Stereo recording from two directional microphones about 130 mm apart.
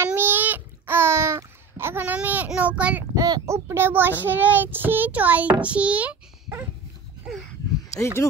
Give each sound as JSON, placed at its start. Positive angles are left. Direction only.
{"t": 0.0, "sound": "a sound", "side_deg": -15}
{"t": 3.2, "sound": "a child's voice", "side_deg": -30}
{"t": 8.2, "sound": "chopping", "side_deg": 25}